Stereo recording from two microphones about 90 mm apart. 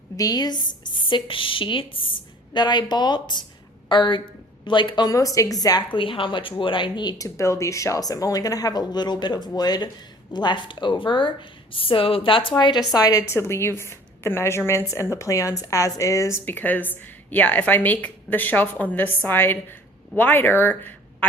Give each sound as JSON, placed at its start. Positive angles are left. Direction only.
{"t": 0.2, "sound": "speech", "side_deg": 45}
{"t": 5.1, "sound": "a woman's voice", "side_deg": 40}
{"t": 5.9, "sound": "speech", "side_deg": 75}
{"t": 7.2, "sound": "speech", "side_deg": 35}
{"t": 13.3, "sound": "a woman's voice", "side_deg": 30}